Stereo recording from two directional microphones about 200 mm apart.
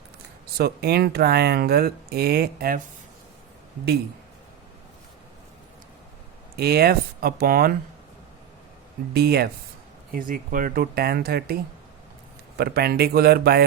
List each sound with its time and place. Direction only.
0.5 s speech: 50° right (ahead or behind)
6.6 s speech: 50° right (ahead or behind)
9.1 s speech: 50° right (ahead or behind)